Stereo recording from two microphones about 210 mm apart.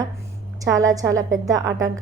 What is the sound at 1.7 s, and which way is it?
Speech, 65° right (ahead or behind).